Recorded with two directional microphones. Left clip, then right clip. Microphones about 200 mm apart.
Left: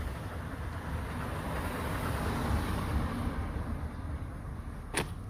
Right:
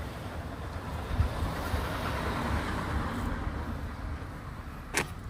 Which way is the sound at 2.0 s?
55° left (ahead or behind).